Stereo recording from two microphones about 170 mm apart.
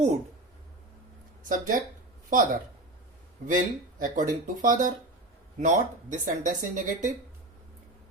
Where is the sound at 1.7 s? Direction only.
55° right (ahead or behind).